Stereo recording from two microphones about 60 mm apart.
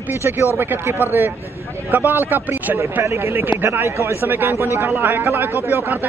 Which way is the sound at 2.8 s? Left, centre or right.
Right.